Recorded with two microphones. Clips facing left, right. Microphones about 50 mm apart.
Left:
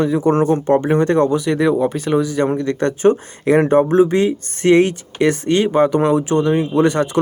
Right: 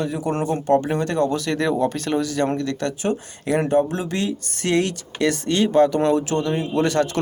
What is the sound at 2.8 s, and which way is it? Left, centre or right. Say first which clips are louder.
Speech: left 9 dB; left.